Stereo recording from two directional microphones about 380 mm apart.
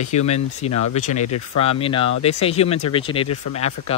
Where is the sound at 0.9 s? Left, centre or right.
Centre.